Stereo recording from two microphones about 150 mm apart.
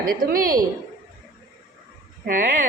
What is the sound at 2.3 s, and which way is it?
Speech, 65° right (ahead or behind).